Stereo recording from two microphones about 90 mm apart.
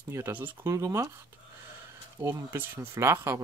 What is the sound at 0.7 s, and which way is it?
Speech, 35° right (ahead or behind).